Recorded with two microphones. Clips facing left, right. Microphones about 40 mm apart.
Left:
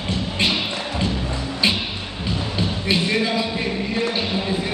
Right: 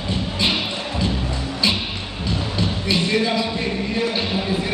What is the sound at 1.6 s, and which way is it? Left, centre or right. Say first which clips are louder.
Music: left 1 dB; left.